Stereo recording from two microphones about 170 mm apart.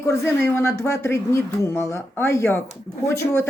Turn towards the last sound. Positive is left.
turn(degrees=15)  # may be behind; listen again after turning